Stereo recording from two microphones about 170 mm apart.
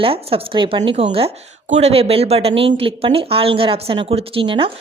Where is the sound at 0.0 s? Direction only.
35° right (ahead or behind).